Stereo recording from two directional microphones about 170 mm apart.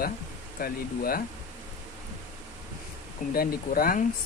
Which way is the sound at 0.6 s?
60° left (ahead or behind).